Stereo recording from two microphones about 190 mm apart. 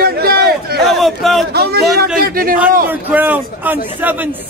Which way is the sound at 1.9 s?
50° right (ahead or behind).